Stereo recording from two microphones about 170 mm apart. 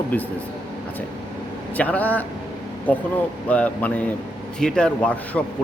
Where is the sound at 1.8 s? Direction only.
10° left (ahead or behind).